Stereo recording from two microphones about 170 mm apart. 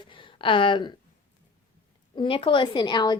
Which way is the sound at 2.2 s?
30° left (ahead or behind).